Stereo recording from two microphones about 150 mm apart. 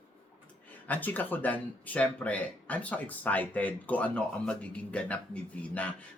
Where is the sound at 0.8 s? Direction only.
10° left (ahead or behind).